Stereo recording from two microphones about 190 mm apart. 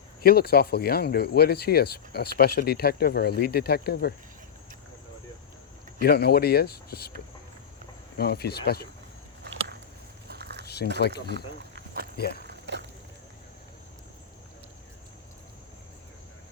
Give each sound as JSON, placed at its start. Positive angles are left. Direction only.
{"t": 0.2, "sound": "speech", "side_deg": 55}
{"t": 6.0, "sound": "speech", "side_deg": 55}
{"t": 8.2, "sound": "speech", "side_deg": 55}
{"t": 9.4, "sound": "a sound", "side_deg": -75}
{"t": 10.2, "sound": "a sound", "side_deg": -55}
{"t": 10.9, "sound": "speech", "side_deg": 60}
{"t": 11.3, "sound": "walk", "side_deg": -60}
{"t": 12.1, "sound": "speech", "side_deg": 55}
{"t": 12.5, "sound": "a sound", "side_deg": -65}